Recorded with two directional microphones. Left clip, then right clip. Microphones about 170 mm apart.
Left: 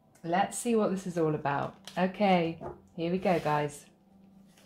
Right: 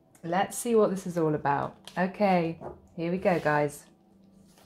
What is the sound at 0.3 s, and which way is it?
Speech, 45° right (ahead or behind).